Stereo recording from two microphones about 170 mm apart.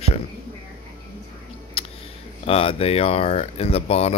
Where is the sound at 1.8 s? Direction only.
35° left (ahead or behind).